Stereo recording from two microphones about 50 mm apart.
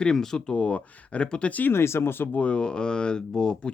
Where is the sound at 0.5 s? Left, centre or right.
Left.